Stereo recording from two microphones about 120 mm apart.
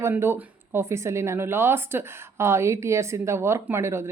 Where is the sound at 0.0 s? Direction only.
20° right (ahead or behind).